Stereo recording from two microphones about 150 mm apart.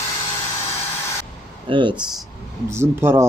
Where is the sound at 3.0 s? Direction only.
25° right (ahead or behind).